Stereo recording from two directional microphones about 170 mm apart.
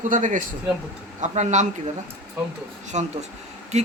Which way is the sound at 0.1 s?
50° right (ahead or behind).